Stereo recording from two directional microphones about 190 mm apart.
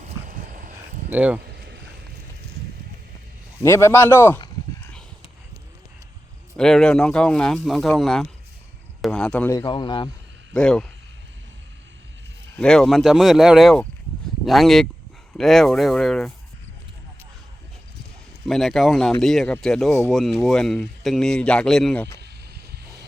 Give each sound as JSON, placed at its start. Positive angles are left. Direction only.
{"t": 0.0, "sound": "a sound", "side_deg": -45}
{"t": 1.1, "sound": "speech", "side_deg": -10}
{"t": 1.5, "sound": "a sound", "side_deg": -60}
{"t": 3.6, "sound": "a man's voice", "side_deg": 15}
{"t": 6.6, "sound": "speech", "side_deg": 5}
{"t": 9.6, "sound": "speech", "side_deg": 25}
{"t": 10.5, "sound": "speech", "side_deg": 5}
{"t": 12.5, "sound": "speech", "side_deg": 5}
{"t": 18.4, "sound": "speech", "side_deg": 0}